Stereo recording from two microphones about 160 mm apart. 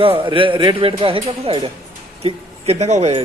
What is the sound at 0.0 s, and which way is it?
A man's voice, 35° right (ahead or behind).